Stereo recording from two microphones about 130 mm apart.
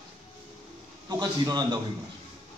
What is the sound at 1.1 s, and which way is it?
Speech, 30° right (ahead or behind).